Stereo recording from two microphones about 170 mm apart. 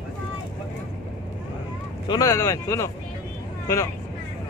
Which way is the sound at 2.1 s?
20° left (ahead or behind).